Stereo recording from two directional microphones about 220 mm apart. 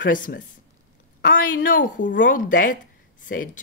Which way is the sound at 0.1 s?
40° left (ahead or behind).